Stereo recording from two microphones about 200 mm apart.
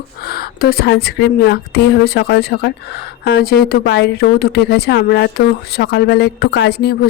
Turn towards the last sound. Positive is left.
turn(degrees=55)  # may be behind; listen again after turning